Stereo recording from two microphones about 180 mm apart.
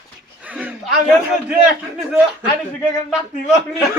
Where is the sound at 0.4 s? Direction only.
5° right (ahead or behind).